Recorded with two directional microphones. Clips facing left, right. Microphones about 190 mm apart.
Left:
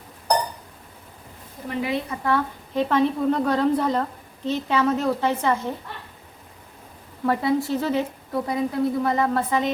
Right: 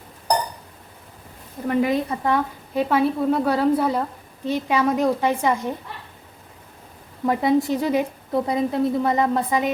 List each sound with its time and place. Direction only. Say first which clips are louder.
1.6 s a woman's voice: right 6 dB; 50° right (ahead or behind)
2.2 s a woman's voice: right 1 dB; 10° right (ahead or behind)
7.3 s a woman's voice: right 3 dB; 15° right (ahead or behind)